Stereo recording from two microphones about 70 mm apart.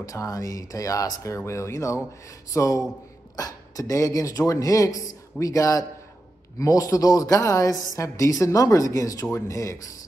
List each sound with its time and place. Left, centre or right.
0.0 s speech: left